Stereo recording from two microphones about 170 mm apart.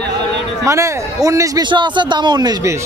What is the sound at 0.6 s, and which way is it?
Speech, 20° right (ahead or behind).